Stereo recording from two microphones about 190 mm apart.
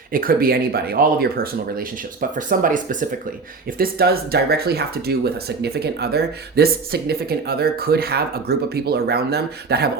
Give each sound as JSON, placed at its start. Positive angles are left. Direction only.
{"t": 0.1, "sound": "speech", "side_deg": -50}